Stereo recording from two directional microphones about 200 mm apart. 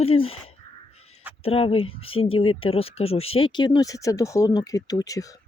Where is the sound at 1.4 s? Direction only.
30° left (ahead or behind).